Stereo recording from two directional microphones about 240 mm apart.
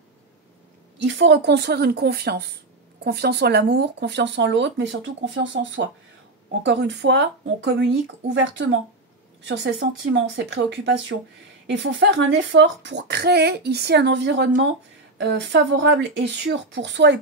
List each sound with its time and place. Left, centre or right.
1.0 s speech: right